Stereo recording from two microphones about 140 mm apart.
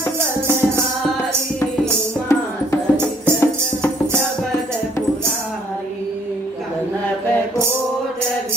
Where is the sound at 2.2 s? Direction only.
20° left (ahead or behind).